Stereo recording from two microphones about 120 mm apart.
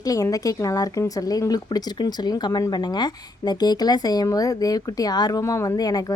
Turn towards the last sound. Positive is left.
turn(degrees=30)  # may be behind; listen again after turning